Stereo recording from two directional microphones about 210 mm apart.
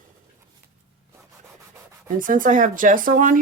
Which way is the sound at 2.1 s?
40° right (ahead or behind).